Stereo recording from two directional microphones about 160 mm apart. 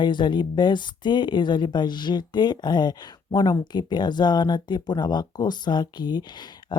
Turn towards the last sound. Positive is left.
turn(degrees=25)  # may be behind; listen again after turning